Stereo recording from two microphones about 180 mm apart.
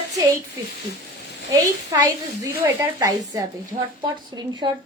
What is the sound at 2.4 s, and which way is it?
A woman's voice, 20° right (ahead or behind).